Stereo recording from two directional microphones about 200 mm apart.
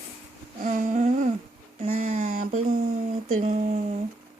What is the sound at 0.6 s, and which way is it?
Humming, 40° right (ahead or behind).